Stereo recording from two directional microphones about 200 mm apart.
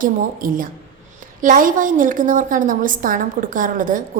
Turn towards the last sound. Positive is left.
turn(degrees=-40)  # may be behind; listen again after turning